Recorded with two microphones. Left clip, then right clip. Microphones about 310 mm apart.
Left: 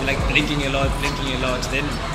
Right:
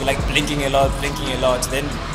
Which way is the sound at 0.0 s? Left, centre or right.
Right.